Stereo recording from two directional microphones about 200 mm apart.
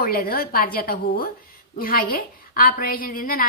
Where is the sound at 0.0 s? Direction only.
50° left (ahead or behind).